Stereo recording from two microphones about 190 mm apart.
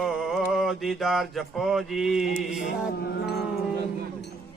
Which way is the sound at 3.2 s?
60° left (ahead or behind).